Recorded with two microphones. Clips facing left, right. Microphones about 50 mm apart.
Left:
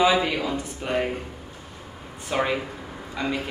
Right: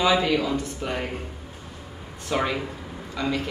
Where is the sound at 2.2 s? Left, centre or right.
Centre.